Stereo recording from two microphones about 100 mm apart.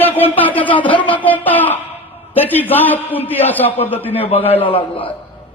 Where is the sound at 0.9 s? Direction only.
55° left (ahead or behind).